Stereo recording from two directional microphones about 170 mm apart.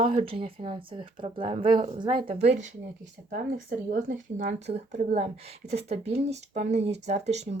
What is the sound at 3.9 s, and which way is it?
Speech, 45° right (ahead or behind).